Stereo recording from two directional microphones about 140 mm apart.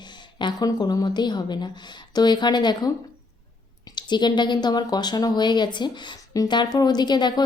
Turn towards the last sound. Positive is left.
turn(degrees=30)  # may be behind; listen again after turning